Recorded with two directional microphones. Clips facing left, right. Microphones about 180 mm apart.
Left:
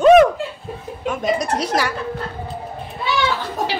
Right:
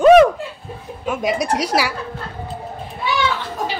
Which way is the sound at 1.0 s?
10° right (ahead or behind).